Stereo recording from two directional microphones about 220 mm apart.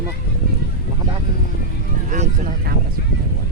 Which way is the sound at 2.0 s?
35° right (ahead or behind).